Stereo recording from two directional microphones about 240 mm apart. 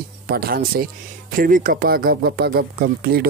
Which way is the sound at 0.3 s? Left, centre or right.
Right.